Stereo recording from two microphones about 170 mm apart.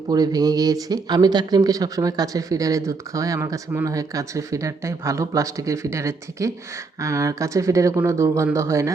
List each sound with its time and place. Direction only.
0.1 s speech: 20° right (ahead or behind)